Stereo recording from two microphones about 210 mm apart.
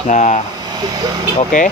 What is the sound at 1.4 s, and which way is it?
Speech, 40° left (ahead or behind).